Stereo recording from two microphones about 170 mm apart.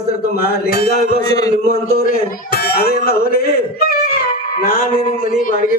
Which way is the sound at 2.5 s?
65° left (ahead or behind).